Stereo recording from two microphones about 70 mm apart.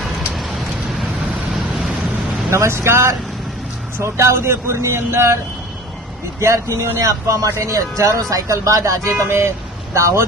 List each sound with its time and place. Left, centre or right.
2.5 s speech: right
6.4 s speech: right